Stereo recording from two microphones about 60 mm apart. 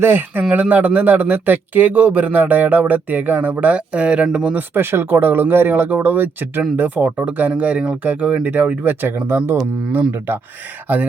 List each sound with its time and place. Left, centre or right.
0.0 s speech: right
4.5 s speech: right